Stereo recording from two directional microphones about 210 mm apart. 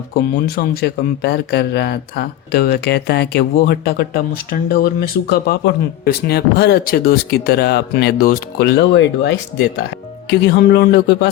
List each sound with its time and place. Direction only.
0.5 s speech: 45° left (ahead or behind)